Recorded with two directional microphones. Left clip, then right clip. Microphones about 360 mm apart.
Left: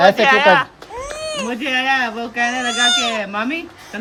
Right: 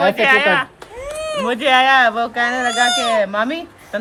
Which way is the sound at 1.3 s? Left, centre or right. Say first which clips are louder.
Right 7 dB; centre.